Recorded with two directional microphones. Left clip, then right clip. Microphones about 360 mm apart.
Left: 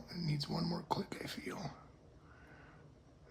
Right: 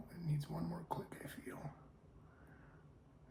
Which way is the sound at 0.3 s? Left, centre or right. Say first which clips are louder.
Left 6 dB; left.